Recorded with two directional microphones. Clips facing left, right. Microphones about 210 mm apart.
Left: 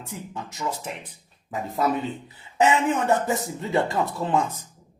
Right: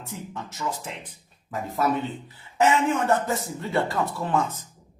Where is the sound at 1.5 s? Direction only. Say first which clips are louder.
Even; 15° left (ahead or behind).